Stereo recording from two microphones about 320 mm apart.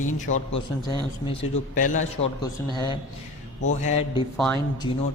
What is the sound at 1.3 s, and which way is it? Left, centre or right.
A man's voice, left.